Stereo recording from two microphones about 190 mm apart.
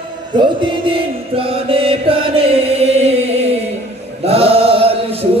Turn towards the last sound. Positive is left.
turn(degrees=-30)  # may be behind; listen again after turning